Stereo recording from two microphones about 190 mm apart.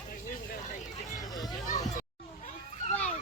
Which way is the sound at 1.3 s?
20° left (ahead or behind).